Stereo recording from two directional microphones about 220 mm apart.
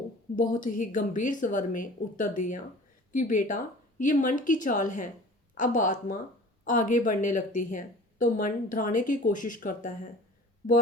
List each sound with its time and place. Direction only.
0.3 s a woman's voice: 40° left (ahead or behind)